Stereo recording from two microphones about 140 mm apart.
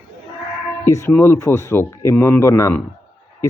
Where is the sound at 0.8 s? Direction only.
20° left (ahead or behind).